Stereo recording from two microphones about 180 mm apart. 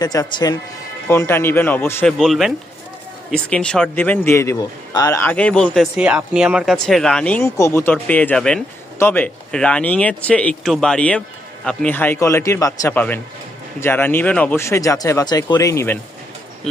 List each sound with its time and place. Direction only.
0.0 s speech: 20° left (ahead or behind)
2.1 s speech: centre (ahead or behind); by 16.0 s 15° left (ahead or behind)